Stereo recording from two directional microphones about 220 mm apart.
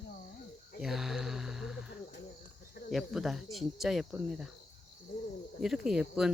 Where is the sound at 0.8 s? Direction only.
Centre (ahead or behind).